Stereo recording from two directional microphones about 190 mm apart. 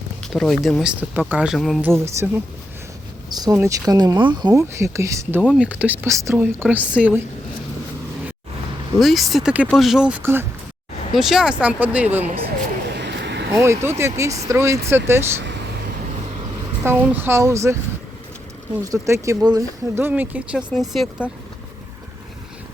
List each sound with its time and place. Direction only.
0.2 s speech: centre (ahead or behind)
1.9 s speech: 10° right (ahead or behind)
5.4 s speech: 5° right (ahead or behind)
9.0 s speech: centre (ahead or behind)
13.0 s a sound: 65° right (ahead or behind)
13.5 s speech: 15° right (ahead or behind)
16.8 s speech: 10° right (ahead or behind)
18.9 s speech: 15° right (ahead or behind); by 21.2 s centre (ahead or behind)